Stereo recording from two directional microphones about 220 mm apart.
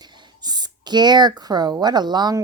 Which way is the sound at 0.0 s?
20° right (ahead or behind).